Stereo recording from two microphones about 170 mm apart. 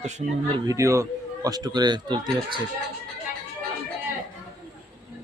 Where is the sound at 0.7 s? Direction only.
15° right (ahead or behind).